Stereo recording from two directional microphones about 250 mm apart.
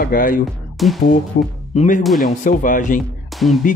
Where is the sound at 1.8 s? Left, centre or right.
Left.